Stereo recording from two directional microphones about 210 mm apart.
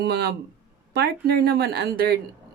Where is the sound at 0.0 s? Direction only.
50° right (ahead or behind).